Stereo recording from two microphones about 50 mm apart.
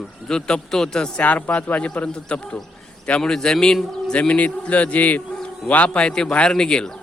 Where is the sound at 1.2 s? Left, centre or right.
Left; by 4.1 s centre.